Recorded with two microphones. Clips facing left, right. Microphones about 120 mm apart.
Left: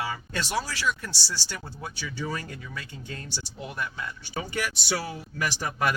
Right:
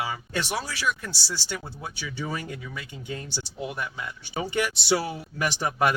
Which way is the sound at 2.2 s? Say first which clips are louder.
Right 1 dB; 15° right (ahead or behind).